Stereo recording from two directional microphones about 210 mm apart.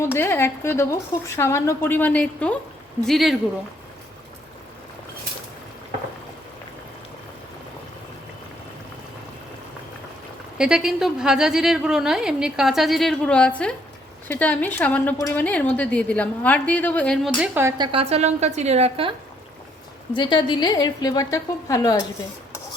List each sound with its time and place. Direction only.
0.0 s a woman's voice: 10° left (ahead or behind)
10.6 s a woman's voice: 5° right (ahead or behind)
17.9 s a woman's voice: 30° right (ahead or behind)
20.1 s a woman's voice: 20° left (ahead or behind)